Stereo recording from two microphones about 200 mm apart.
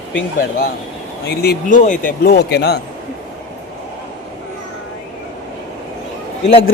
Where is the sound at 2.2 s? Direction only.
55° left (ahead or behind).